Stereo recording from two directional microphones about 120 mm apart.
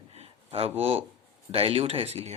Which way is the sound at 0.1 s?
60° right (ahead or behind).